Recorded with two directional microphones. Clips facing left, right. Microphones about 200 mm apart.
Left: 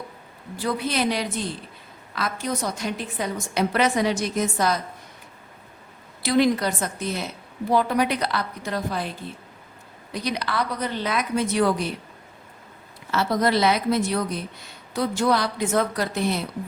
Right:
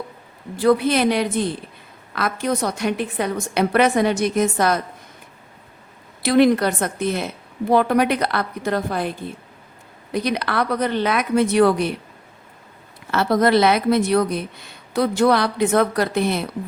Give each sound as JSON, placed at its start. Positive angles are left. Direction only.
{"t": 0.6, "sound": "speech", "side_deg": -60}
{"t": 6.2, "sound": "speech", "side_deg": -60}
{"t": 13.1, "sound": "speech", "side_deg": -60}